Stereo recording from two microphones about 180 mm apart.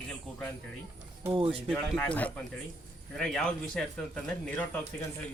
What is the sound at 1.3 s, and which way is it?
Speech, 30° right (ahead or behind).